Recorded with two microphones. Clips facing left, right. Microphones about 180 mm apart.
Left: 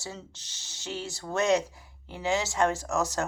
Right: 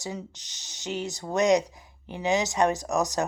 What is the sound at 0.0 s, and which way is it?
Speech, 15° right (ahead or behind).